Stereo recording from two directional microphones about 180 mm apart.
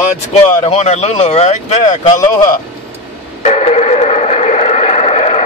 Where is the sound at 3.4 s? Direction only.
35° left (ahead or behind).